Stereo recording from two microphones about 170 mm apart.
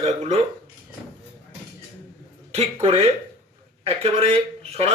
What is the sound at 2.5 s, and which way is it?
Speech, 35° right (ahead or behind).